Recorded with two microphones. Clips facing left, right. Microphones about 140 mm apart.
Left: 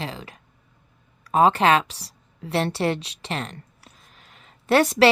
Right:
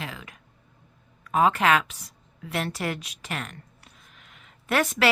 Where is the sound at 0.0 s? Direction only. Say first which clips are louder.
Left 5 dB; 30° left (ahead or behind).